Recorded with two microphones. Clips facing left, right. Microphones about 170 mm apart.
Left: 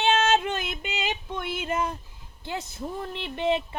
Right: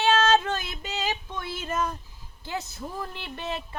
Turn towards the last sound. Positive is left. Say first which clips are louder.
# left 8 dB
turn(degrees=20)  # may be behind; listen again after turning